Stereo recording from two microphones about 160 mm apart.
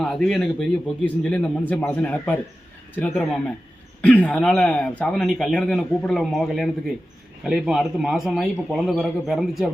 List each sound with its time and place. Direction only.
0.0 s a man's voice: 5° left (ahead or behind)